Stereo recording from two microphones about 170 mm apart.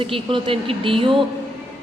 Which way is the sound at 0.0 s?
30° right (ahead or behind).